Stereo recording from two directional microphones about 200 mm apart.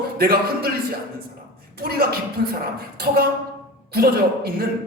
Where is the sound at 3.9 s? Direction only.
50° right (ahead or behind).